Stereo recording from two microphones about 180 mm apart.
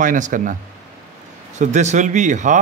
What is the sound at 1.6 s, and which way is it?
Speech, 40° right (ahead or behind).